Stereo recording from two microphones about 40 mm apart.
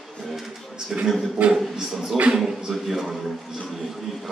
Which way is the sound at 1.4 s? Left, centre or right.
Right.